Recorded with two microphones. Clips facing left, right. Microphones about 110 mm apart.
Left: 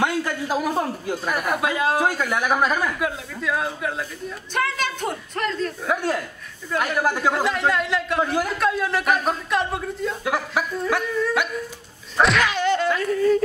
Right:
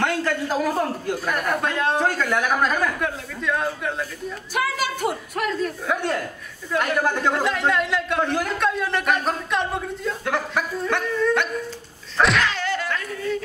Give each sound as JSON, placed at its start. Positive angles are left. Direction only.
{"t": 0.0, "sound": "a man's voice", "side_deg": 10}
{"t": 4.6, "sound": "a woman's voice", "side_deg": -5}
{"t": 5.9, "sound": "speech", "side_deg": 5}
{"t": 12.2, "sound": "whack", "side_deg": 0}
{"t": 12.4, "sound": "whack", "side_deg": 20}